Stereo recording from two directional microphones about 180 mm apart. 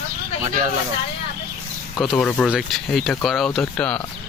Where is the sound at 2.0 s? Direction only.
Centre (ahead or behind).